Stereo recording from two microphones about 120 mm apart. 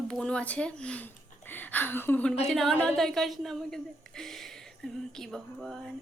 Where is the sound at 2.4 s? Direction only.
5° left (ahead or behind).